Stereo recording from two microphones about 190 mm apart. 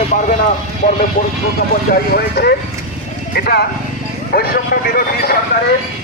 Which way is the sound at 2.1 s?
60° left (ahead or behind).